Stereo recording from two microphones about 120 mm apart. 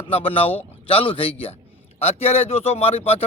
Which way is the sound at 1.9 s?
60° left (ahead or behind).